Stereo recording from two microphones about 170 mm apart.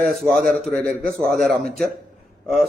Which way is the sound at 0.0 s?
Centre (ahead or behind).